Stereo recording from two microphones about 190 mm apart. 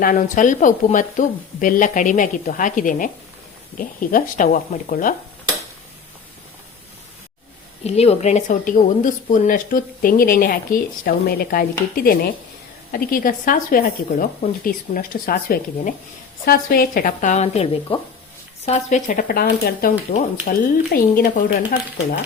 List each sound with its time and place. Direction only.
0.0 s speech: 45° left (ahead or behind)
7.9 s speech: 35° left (ahead or behind); by 22.2 s 50° left (ahead or behind)